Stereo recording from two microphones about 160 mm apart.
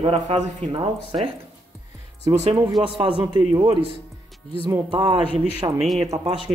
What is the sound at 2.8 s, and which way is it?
Speech, 35° right (ahead or behind).